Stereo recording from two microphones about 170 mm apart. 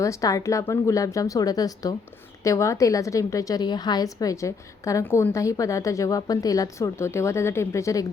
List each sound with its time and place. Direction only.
0.0 s a woman's voice: 20° left (ahead or behind)